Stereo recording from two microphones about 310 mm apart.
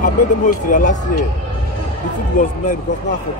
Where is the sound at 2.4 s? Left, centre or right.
Left.